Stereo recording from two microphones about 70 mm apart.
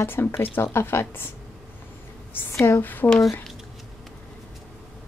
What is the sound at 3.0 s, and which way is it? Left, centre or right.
Speech, left.